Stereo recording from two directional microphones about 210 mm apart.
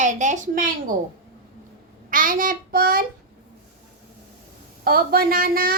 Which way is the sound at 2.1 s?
40° right (ahead or behind).